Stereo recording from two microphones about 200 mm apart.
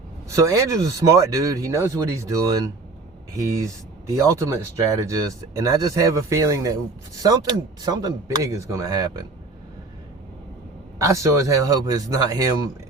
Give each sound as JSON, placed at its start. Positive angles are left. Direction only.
{"t": 0.3, "sound": "speech", "side_deg": -15}
{"t": 10.9, "sound": "speech", "side_deg": -15}